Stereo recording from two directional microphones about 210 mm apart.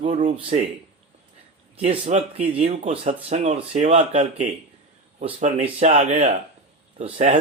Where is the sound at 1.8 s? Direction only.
30° right (ahead or behind).